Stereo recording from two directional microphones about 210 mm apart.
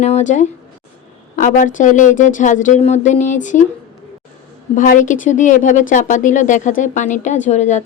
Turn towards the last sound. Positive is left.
turn(degrees=35)  # may be behind; listen again after turning